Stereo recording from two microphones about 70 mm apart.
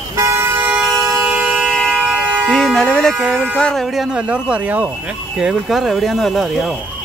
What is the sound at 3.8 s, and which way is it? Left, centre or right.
Speech, centre.